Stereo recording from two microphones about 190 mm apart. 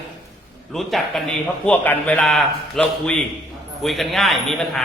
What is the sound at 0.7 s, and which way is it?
A man's voice, centre (ahead or behind).